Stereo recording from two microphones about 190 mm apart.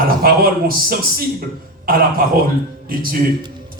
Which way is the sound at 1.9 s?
50° right (ahead or behind).